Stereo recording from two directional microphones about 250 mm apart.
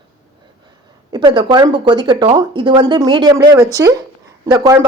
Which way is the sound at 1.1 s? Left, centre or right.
Centre.